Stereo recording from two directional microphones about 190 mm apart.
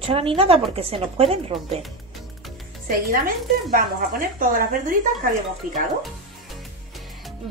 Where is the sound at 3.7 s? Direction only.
50° right (ahead or behind).